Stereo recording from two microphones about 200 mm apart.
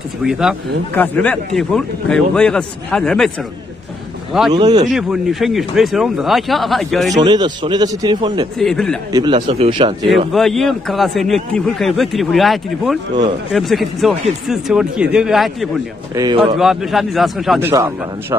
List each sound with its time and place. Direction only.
0.2 s a man's voice: centre (ahead or behind)
0.9 s a man's voice: 10° left (ahead or behind)
4.5 s a man's voice: 20° right (ahead or behind)
4.9 s a man's voice: centre (ahead or behind)
7.2 s a man's voice: 20° right (ahead or behind)
8.5 s a man's voice: centre (ahead or behind)
9.1 s a man's voice: 25° right (ahead or behind)
10.0 s a man's voice: centre (ahead or behind)
16.2 s a man's voice: 25° right (ahead or behind)
16.5 s a man's voice: centre (ahead or behind)
17.6 s speech: 10° right (ahead or behind)